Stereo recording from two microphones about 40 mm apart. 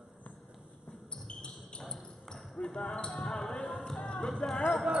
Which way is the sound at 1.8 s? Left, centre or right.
Centre.